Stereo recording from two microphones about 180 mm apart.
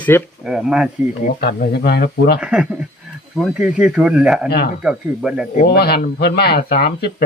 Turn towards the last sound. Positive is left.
turn(degrees=60)  # may be behind; listen again after turning